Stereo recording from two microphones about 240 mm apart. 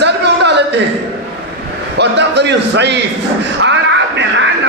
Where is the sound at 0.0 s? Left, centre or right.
Right.